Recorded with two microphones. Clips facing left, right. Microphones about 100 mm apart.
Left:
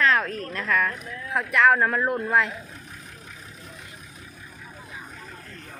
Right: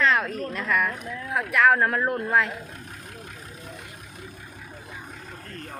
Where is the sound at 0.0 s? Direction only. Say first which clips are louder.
Even; centre (ahead or behind).